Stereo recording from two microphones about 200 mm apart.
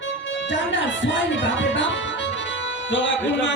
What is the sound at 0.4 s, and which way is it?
Speech, 65° left (ahead or behind).